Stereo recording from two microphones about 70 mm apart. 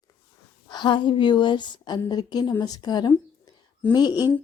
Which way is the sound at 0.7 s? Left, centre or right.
Left.